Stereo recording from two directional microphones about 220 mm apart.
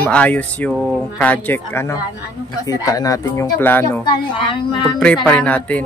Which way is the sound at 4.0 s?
20° left (ahead or behind).